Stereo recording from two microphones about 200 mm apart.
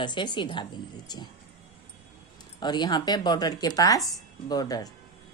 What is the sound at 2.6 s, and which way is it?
A woman's voice, 20° left (ahead or behind).